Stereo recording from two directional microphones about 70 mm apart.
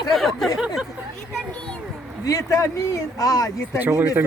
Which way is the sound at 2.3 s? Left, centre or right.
Left.